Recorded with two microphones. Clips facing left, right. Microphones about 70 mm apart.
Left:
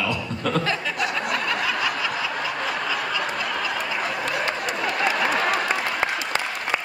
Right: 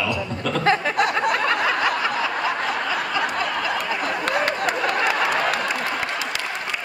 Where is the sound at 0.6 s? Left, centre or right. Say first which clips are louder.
Right 6 dB; right.